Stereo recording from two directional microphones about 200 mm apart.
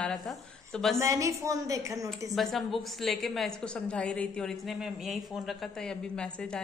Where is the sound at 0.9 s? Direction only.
15° right (ahead or behind).